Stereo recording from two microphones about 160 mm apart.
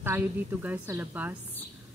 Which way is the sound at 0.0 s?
15° right (ahead or behind).